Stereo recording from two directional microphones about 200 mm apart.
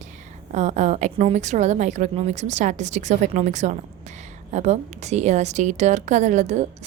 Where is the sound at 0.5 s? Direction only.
35° right (ahead or behind).